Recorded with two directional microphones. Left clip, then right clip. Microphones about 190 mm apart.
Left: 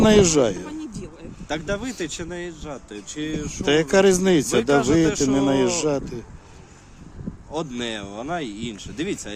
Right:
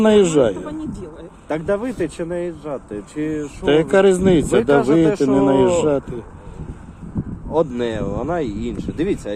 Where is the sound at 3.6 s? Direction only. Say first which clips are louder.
Right 3 dB; 35° left (ahead or behind).